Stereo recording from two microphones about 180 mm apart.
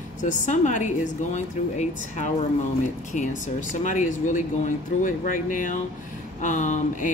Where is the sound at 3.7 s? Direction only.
45° left (ahead or behind).